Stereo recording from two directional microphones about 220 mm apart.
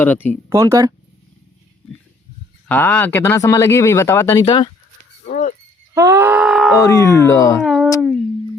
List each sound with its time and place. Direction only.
0.0 s speech: 10° left (ahead or behind)
0.5 s speech: 15° right (ahead or behind)
2.6 s speech: 10° left (ahead or behind)
5.2 s a sound: 35° left (ahead or behind)
5.9 s groan: 15° right (ahead or behind)
6.8 s speech: 15° left (ahead or behind)
7.6 s a sound: centre (ahead or behind)